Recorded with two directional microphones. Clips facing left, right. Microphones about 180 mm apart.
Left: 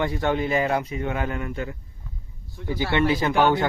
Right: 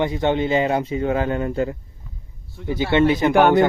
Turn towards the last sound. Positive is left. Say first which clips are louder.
# right 5 dB
turn(degrees=-65)  # may be behind; listen again after turning